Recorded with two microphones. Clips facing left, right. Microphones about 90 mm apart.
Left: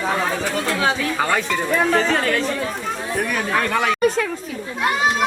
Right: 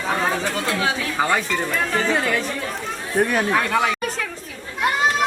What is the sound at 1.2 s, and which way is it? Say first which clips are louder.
Speech: even; 10° right (ahead or behind).